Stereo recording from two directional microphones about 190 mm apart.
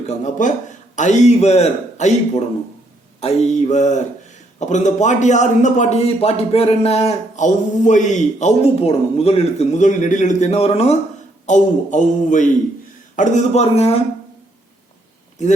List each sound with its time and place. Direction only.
0.1 s a man's voice: 40° left (ahead or behind)